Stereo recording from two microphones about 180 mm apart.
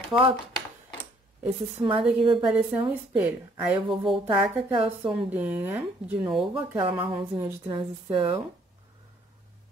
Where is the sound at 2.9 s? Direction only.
10° right (ahead or behind).